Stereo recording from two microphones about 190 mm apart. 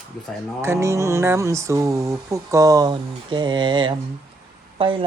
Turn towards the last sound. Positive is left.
turn(degrees=-25)  # may be behind; listen again after turning